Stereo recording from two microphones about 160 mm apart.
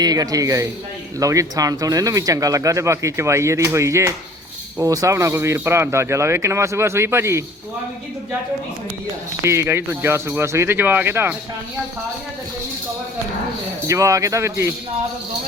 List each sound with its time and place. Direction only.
0.0 s speech: 25° right (ahead or behind)
9.4 s speech: 15° right (ahead or behind)
13.8 s speech: 20° right (ahead or behind)